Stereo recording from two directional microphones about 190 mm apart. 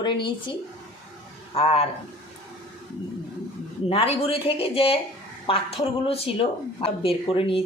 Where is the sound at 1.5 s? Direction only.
30° left (ahead or behind).